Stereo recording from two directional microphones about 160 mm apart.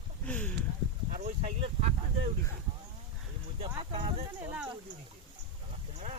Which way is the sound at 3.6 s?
40° right (ahead or behind).